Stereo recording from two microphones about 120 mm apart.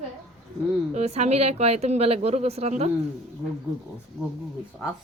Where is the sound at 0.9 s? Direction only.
65° right (ahead or behind).